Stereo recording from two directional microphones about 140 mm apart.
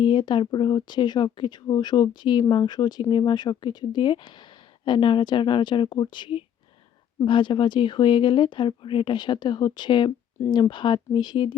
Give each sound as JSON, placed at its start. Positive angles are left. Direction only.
{"t": 0.0, "sound": "speech", "side_deg": 35}